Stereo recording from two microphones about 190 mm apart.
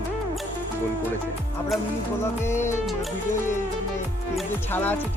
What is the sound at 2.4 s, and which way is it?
Speech, 15° left (ahead or behind).